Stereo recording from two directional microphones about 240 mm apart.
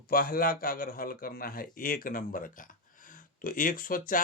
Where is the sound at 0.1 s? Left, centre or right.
Left.